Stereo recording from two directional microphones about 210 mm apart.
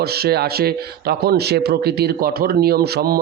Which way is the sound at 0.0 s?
50° right (ahead or behind).